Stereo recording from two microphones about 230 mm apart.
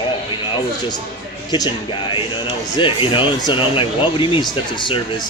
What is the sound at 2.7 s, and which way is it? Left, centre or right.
Speech, left.